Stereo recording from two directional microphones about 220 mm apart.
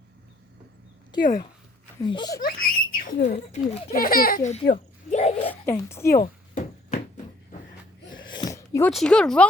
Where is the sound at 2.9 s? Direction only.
35° left (ahead or behind).